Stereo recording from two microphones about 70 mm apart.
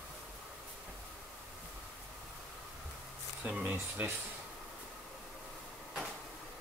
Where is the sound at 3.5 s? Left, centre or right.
Right.